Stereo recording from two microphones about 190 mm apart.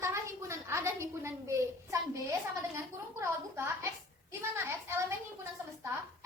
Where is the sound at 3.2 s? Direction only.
15° right (ahead or behind).